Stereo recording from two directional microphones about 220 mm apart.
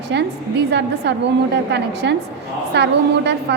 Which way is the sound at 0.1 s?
50° right (ahead or behind).